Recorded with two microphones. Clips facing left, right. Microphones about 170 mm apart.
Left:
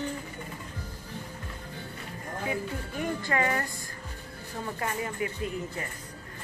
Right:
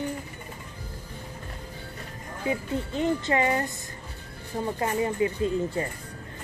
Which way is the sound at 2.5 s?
25° right (ahead or behind).